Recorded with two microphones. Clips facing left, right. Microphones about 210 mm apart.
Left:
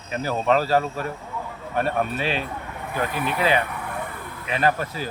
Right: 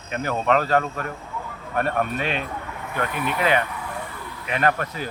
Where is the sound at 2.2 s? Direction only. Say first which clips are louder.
Even; 30° left (ahead or behind).